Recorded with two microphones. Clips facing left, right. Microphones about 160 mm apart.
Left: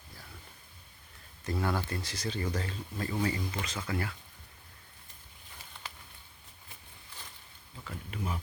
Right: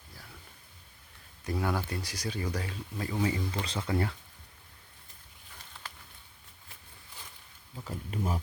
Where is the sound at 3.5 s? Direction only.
30° right (ahead or behind).